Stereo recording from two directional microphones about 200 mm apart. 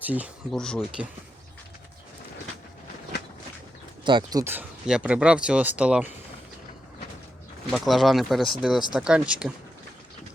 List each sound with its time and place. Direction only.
0.0 s speech: 10° right (ahead or behind)
0.5 s speech: 5° left (ahead or behind)
4.0 s speech: 20° right (ahead or behind)
7.7 s speech: centre (ahead or behind)